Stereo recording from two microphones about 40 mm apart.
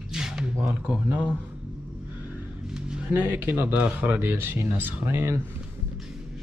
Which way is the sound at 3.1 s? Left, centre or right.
Right.